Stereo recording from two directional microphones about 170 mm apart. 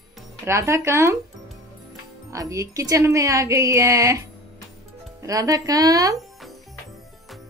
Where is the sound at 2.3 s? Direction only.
20° right (ahead or behind).